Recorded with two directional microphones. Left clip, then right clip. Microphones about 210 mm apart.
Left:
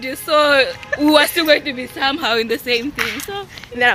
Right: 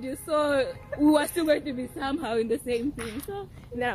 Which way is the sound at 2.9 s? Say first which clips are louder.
Left 15 dB; 10° left (ahead or behind).